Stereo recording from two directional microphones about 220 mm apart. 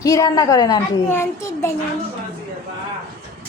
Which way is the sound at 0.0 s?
15° left (ahead or behind).